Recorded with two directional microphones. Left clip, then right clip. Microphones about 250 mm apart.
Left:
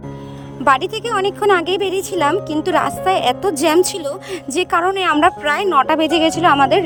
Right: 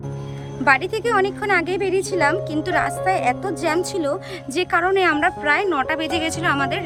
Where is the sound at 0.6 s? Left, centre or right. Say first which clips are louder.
Left 2 dB; left.